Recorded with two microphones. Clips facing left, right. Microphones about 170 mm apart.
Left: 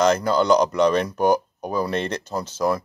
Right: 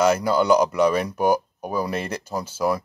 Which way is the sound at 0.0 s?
10° right (ahead or behind).